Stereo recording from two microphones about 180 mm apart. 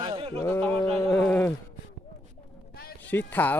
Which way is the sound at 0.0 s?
30° right (ahead or behind).